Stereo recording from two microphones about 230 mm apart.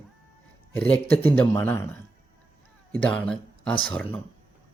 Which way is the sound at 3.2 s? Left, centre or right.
Centre.